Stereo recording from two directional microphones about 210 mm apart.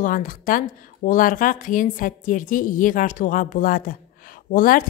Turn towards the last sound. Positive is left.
turn(degrees=40)  # may be behind; listen again after turning